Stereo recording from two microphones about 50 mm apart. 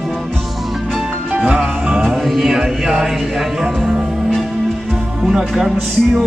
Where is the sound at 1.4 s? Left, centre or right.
Centre.